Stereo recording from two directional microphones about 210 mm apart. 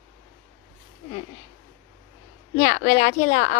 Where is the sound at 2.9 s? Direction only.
35° left (ahead or behind).